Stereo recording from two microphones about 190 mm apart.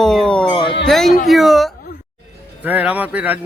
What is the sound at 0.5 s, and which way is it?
Speech, 25° left (ahead or behind).